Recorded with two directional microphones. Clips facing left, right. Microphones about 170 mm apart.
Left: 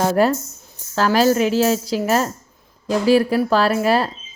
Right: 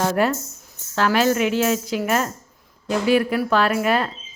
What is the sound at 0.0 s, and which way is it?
A woman's voice, 35° left (ahead or behind).